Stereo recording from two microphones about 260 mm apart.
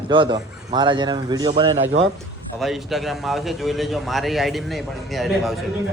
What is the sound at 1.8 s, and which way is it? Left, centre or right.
Speech, right.